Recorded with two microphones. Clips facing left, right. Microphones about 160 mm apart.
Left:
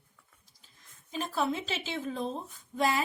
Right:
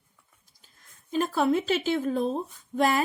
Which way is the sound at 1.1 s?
55° right (ahead or behind).